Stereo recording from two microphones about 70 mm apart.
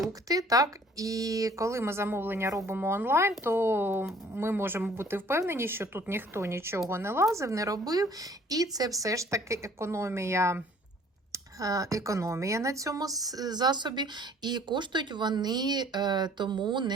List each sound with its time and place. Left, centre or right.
0.3 s a woman's voice: right
7.3 s a woman's voice: right
11.3 s speech: right